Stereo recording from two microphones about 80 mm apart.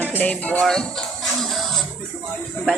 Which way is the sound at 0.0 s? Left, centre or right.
Left.